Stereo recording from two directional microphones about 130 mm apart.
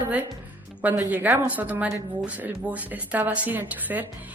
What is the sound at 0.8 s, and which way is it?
A woman's voice, 10° right (ahead or behind).